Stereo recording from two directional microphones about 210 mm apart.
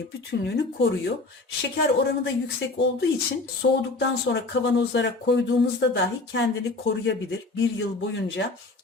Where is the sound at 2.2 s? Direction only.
55° left (ahead or behind).